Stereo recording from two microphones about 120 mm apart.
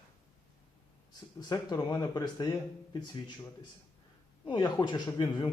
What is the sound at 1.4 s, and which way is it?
Speech, 35° left (ahead or behind).